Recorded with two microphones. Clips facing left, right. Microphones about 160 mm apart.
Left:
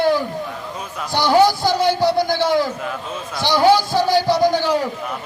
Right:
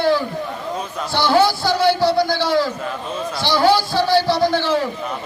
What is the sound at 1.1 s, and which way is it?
A man's voice, 15° left (ahead or behind).